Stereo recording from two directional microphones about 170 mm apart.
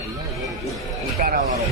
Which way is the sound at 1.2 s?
60° right (ahead or behind).